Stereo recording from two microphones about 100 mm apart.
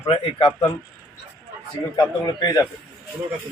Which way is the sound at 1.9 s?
40° left (ahead or behind).